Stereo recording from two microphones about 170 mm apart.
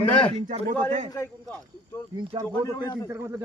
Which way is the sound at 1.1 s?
15° left (ahead or behind).